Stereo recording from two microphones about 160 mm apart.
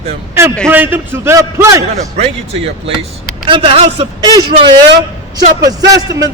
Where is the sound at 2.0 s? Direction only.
40° right (ahead or behind).